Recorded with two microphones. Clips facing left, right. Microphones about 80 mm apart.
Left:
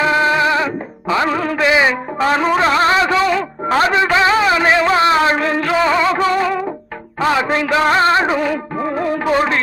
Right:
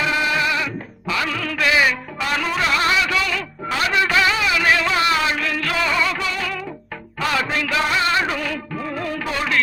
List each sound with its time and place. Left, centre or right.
0.0 s music: left
4.0 s a man's voice: left
7.2 s music: left